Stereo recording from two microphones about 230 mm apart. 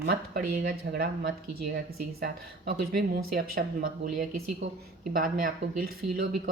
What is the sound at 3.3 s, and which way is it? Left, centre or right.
Speech, right.